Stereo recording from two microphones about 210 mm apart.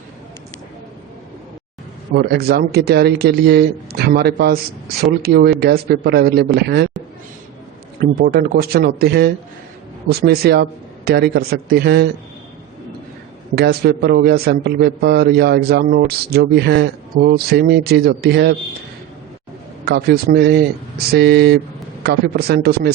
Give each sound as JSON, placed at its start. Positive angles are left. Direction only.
{"t": 2.1, "sound": "a man's voice", "side_deg": -50}
{"t": 8.2, "sound": "a man's voice", "side_deg": -45}
{"t": 13.6, "sound": "a man's voice", "side_deg": -50}
{"t": 19.8, "sound": "a man's voice", "side_deg": -50}